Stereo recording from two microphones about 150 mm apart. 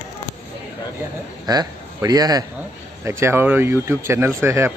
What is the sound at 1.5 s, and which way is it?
A man's voice, 25° right (ahead or behind).